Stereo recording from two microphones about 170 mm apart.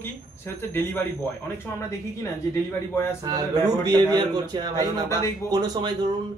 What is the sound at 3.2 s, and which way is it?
A man's voice, 20° right (ahead or behind).